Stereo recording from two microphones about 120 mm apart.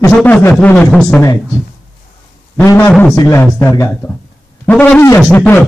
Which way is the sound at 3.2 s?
25° left (ahead or behind).